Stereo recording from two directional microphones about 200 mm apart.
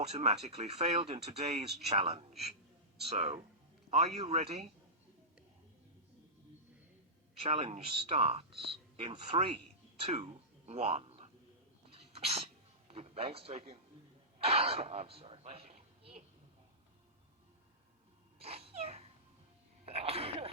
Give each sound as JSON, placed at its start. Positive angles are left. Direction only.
{"t": 0.1, "sound": "speech", "side_deg": -35}
{"t": 7.4, "sound": "speech", "side_deg": -30}
{"t": 12.1, "sound": "sneeze", "side_deg": -30}
{"t": 12.9, "sound": "a man's voice", "side_deg": -30}
{"t": 18.3, "sound": "babbling", "side_deg": -30}
{"t": 19.8, "sound": "sneeze", "side_deg": -30}